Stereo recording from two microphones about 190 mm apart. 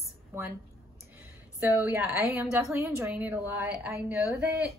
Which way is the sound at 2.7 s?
15° right (ahead or behind).